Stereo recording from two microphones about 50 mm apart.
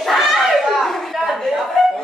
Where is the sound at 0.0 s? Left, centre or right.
Centre.